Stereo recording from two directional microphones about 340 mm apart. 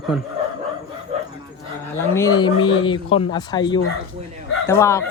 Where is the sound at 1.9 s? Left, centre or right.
Centre.